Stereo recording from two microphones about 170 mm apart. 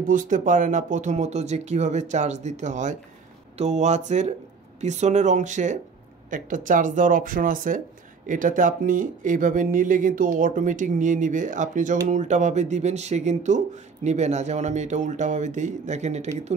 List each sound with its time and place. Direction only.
0.0 s speech: 50° right (ahead or behind)